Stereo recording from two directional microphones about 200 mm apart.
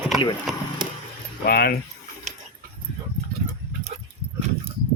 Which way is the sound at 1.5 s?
50° left (ahead or behind).